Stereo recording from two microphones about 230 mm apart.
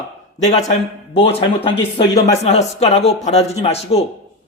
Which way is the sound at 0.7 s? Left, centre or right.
Left.